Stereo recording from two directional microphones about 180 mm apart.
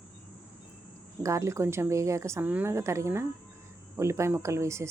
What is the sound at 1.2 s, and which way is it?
Speech, 15° right (ahead or behind).